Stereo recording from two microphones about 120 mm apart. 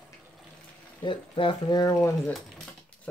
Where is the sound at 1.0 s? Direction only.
45° left (ahead or behind).